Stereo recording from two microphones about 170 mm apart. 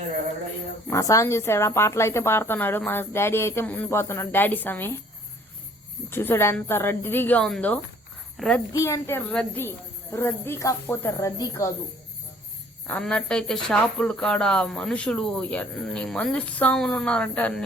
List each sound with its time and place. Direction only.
0.9 s a woman's voice: 20° left (ahead or behind)
6.1 s a woman's voice: 15° left (ahead or behind)
8.7 s a woman's voice: 15° left (ahead or behind)
12.9 s speech: 5° left (ahead or behind)